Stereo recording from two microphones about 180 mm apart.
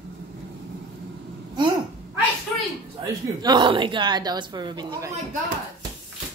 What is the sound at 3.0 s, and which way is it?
A woman's voice, 25° right (ahead or behind).